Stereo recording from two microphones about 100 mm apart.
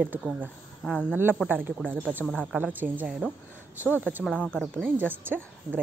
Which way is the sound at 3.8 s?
20° left (ahead or behind).